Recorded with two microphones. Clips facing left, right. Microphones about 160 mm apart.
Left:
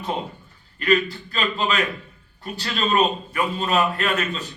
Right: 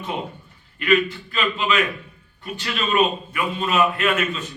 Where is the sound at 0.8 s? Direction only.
40° left (ahead or behind).